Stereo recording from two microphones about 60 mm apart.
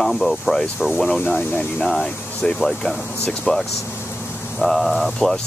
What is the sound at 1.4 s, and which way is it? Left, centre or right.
Speech, left.